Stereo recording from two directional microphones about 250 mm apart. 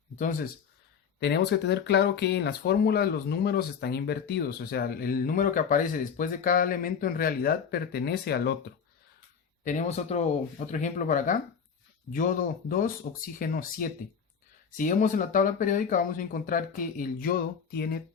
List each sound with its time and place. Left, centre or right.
0.2 s speech: left
9.6 s speech: left